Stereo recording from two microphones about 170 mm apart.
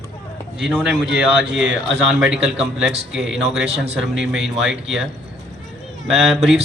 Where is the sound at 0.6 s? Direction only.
5° right (ahead or behind).